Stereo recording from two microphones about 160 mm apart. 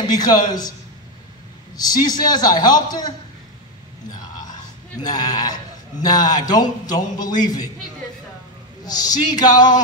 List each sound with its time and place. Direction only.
0.1 s speech: 25° left (ahead or behind)
1.8 s speech: 25° left (ahead or behind)
5.0 s speech: 25° left (ahead or behind)
8.8 s speech: 25° left (ahead or behind)